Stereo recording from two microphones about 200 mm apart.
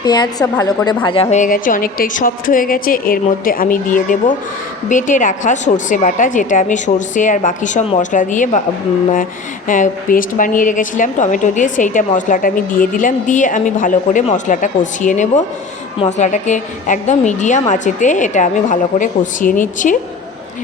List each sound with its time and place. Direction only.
0.0 s a woman's voice: 20° left (ahead or behind); by 8.6 s 40° left (ahead or behind)
9.6 s a woman's voice: 40° left (ahead or behind)